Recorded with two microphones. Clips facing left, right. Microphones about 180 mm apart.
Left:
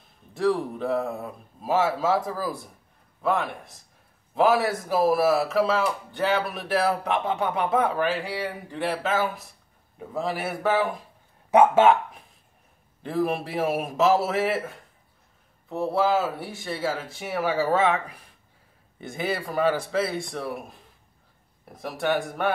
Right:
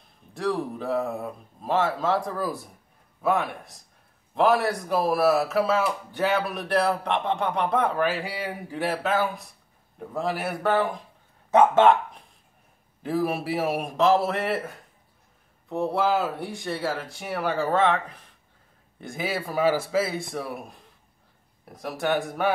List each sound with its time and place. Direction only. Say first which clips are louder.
0.3 s speech: left 3 dB; centre (ahead or behind)